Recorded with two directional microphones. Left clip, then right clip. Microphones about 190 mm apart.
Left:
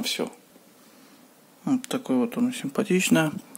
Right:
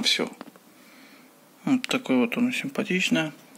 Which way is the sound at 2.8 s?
35° left (ahead or behind).